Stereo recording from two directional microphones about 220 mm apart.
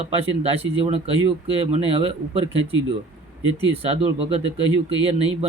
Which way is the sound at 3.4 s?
20° left (ahead or behind).